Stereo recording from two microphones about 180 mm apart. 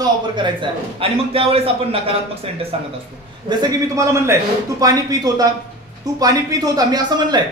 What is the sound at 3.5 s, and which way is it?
A man's voice, 20° right (ahead or behind).